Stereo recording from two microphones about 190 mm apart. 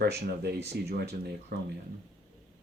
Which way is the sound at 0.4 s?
60° right (ahead or behind).